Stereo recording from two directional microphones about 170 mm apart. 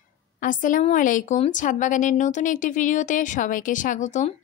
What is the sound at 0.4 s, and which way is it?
Speech, 50° left (ahead or behind).